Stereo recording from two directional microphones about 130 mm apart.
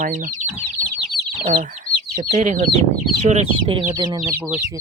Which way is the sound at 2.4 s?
65° right (ahead or behind).